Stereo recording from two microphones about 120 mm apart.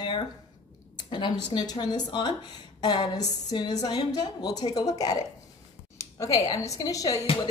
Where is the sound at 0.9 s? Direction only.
40° left (ahead or behind).